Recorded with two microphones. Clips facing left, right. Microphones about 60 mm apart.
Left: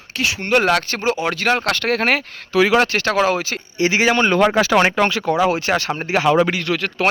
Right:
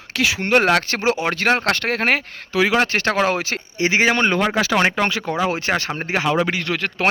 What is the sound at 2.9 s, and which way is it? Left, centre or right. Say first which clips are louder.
Speech: left 1 dB; right.